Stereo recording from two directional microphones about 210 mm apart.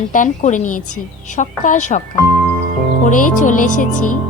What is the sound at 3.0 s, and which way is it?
A woman's voice, 40° left (ahead or behind).